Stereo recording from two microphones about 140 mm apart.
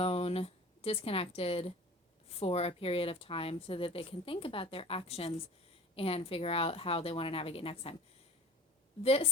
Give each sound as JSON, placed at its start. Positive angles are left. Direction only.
{"t": 0.0, "sound": "speech", "side_deg": 45}
{"t": 9.0, "sound": "a woman's voice", "side_deg": 45}